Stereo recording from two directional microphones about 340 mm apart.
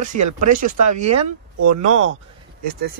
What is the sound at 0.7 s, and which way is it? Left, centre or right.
Speech, right.